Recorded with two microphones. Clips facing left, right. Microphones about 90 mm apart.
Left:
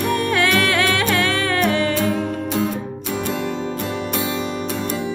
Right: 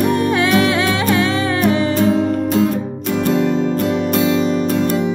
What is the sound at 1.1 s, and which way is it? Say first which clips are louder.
Music: right 3 dB; 20° right (ahead or behind).